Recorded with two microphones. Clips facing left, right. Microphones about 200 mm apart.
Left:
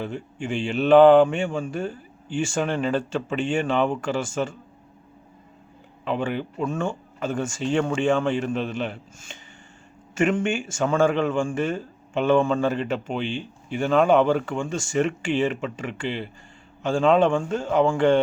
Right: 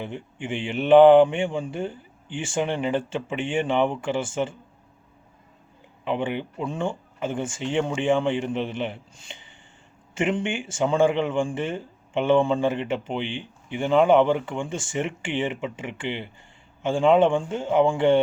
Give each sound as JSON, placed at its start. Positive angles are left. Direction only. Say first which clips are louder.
{"t": 0.0, "sound": "speech", "louder": "left 3 dB", "side_deg": -20}
{"t": 6.1, "sound": "speech", "louder": "even", "side_deg": -20}